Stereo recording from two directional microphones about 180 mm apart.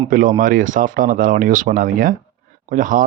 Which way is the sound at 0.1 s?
50° right (ahead or behind).